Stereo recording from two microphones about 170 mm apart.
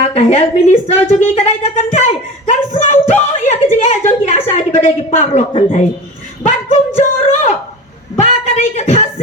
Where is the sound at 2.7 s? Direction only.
45° left (ahead or behind).